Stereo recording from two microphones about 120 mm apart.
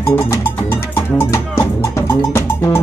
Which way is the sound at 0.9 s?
20° left (ahead or behind).